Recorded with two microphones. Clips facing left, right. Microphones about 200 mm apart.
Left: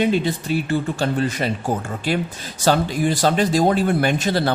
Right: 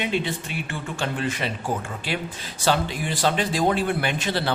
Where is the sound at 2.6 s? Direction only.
40° left (ahead or behind).